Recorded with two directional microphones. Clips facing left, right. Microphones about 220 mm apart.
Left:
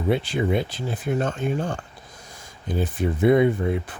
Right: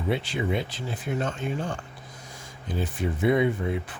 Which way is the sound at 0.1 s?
45° left (ahead or behind).